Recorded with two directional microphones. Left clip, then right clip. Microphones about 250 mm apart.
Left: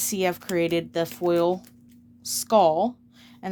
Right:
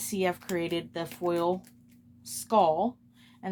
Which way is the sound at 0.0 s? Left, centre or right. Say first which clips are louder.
Left 4 dB; left.